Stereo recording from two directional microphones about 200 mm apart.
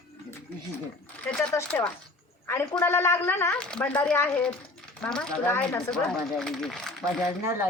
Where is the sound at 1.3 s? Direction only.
5° left (ahead or behind).